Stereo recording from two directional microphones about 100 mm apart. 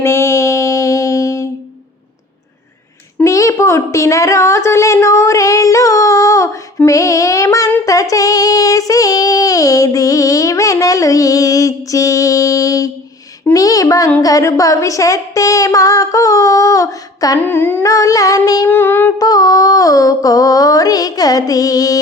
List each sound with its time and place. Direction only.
0.0 s music: 25° left (ahead or behind)
3.2 s a woman's voice: 30° left (ahead or behind)
7.9 s child singing: 35° left (ahead or behind)
13.5 s speech: 35° left (ahead or behind)
17.4 s humming: 20° left (ahead or behind)
17.8 s speech: 35° left (ahead or behind)
18.7 s humming: 20° left (ahead or behind)
19.2 s speech: 40° left (ahead or behind)